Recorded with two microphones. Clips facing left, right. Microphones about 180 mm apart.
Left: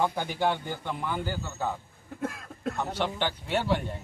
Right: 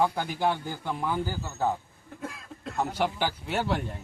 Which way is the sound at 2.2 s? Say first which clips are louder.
Left 5 dB; 50° left (ahead or behind).